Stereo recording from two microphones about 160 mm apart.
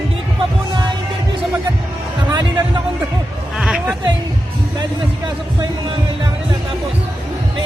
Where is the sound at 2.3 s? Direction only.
25° right (ahead or behind).